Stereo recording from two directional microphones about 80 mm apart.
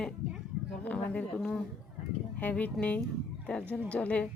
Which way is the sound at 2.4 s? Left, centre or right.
Left.